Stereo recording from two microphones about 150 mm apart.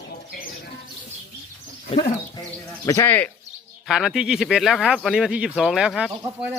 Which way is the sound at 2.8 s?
20° left (ahead or behind).